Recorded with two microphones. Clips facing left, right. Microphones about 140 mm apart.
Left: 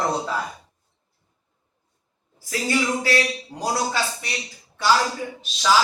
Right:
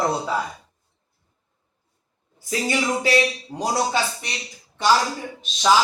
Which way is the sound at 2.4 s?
20° right (ahead or behind).